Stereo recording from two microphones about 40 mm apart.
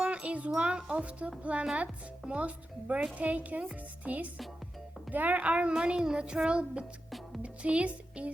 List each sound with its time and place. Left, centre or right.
0.0 s a child's voice: right
5.7 s speech: centre